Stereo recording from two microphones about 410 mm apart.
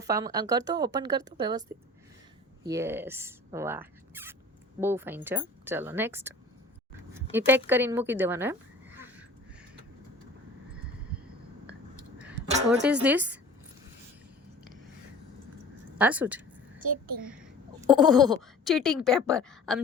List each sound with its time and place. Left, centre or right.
0.0 s speech: centre
2.6 s speech: centre
7.1 s a sound: centre
7.7 s speech: centre
9.0 s a sound: centre
12.6 s speech: centre
16.0 s a sound: centre
16.8 s a child's voice: centre
17.2 s speech: centre